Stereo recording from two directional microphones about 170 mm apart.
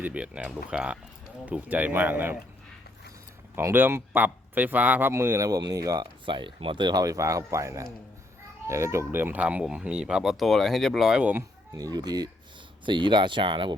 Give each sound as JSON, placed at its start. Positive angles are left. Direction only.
{"t": 0.0, "sound": "speech", "side_deg": -5}
{"t": 3.5, "sound": "speech", "side_deg": -15}
{"t": 11.7, "sound": "speech", "side_deg": -20}